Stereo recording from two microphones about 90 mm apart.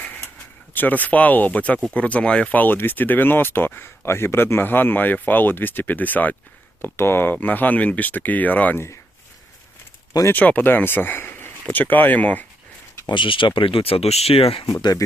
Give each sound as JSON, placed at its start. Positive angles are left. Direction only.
{"t": 0.7, "sound": "speech", "side_deg": 20}
{"t": 10.1, "sound": "speech", "side_deg": 35}
{"t": 10.3, "sound": "speech", "side_deg": 15}
{"t": 13.1, "sound": "speech", "side_deg": 65}
{"t": 14.6, "sound": "speech", "side_deg": 50}